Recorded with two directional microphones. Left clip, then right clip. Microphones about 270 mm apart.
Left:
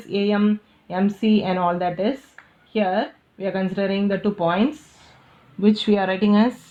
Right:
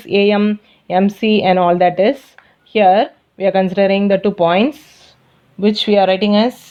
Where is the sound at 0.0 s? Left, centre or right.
Right.